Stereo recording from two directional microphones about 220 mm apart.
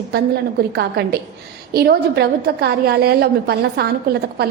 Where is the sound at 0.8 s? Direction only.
45° right (ahead or behind).